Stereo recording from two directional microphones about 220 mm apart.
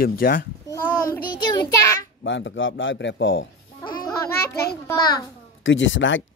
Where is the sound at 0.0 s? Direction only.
40° left (ahead or behind).